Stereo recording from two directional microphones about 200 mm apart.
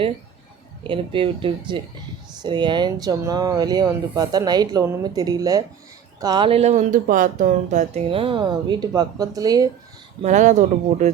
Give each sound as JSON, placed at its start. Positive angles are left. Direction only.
{"t": 0.9, "sound": "speech", "side_deg": -25}
{"t": 10.2, "sound": "speech", "side_deg": -35}